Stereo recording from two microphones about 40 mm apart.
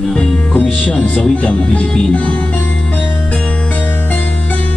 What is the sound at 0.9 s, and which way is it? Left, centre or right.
Music, centre.